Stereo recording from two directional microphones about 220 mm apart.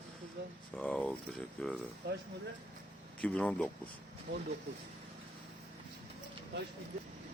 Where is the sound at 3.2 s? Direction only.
5° left (ahead or behind).